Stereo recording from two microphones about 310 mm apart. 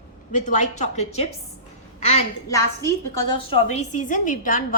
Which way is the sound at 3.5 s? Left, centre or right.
Left.